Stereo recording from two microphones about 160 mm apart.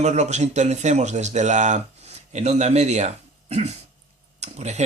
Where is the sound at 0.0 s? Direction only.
45° right (ahead or behind).